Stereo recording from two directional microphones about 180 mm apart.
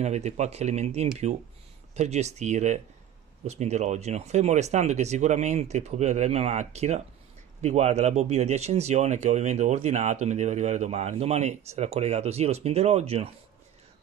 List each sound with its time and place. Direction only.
0.0 s speech: 40° right (ahead or behind)